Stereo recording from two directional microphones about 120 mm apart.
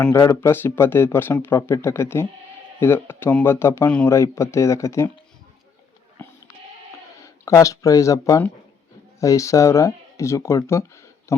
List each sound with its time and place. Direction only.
0.1 s speech: 20° left (ahead or behind)
7.4 s speech: 25° left (ahead or behind)